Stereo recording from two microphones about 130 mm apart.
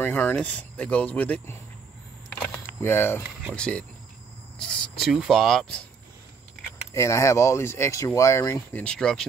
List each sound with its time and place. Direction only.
0.0 s speech: 15° left (ahead or behind)
2.2 s a sound: 15° left (ahead or behind)
3.5 s speech: 5° left (ahead or behind)
6.9 s speech: 25° left (ahead or behind)
8.7 s speech: 5° left (ahead or behind)